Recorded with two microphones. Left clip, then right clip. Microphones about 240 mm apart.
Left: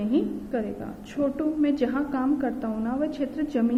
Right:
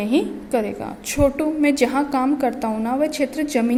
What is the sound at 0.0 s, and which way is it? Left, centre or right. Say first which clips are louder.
A woman's voice: right 5 dB; right.